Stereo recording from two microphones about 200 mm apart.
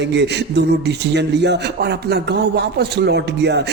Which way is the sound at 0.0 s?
60° right (ahead or behind).